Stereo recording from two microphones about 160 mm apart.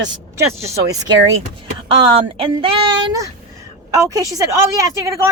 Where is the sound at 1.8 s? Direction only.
35° right (ahead or behind).